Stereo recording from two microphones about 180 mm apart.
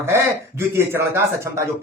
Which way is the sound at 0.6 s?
15° right (ahead or behind).